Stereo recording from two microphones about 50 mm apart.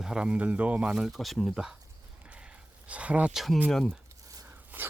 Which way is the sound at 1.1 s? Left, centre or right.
Centre.